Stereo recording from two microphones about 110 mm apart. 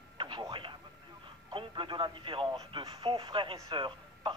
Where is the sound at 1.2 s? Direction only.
50° right (ahead or behind).